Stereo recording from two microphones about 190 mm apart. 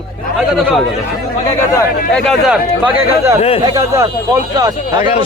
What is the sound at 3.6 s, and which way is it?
A man's voice, 20° right (ahead or behind).